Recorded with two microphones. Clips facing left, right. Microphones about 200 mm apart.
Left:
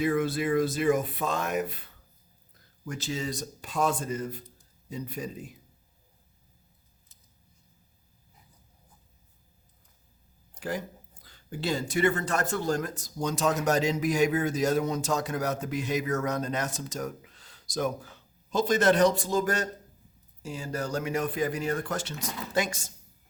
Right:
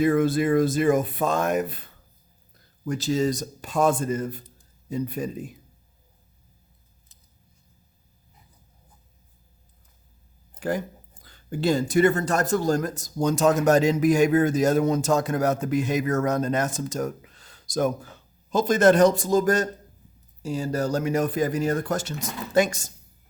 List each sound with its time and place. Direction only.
0.0 s speech: 50° right (ahead or behind)
2.8 s speech: 35° right (ahead or behind)
10.6 s speech: 50° right (ahead or behind)